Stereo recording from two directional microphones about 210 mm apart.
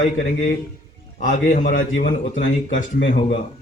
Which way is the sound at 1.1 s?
40° left (ahead or behind).